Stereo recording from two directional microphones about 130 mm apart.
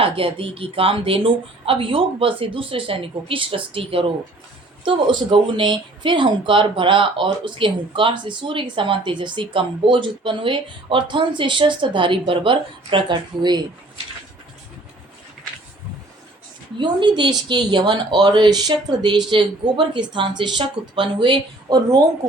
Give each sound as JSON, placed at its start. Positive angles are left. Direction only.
{"t": 0.0, "sound": "speech", "side_deg": -45}
{"t": 16.7, "sound": "speech", "side_deg": -35}